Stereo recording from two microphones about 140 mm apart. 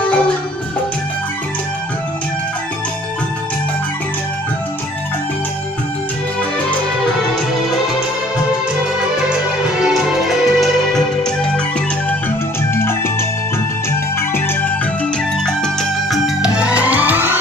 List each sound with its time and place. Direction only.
9.9 s music: centre (ahead or behind)
12.7 s music: 15° left (ahead or behind)
15.4 s music: centre (ahead or behind); by 17.4 s 15° right (ahead or behind)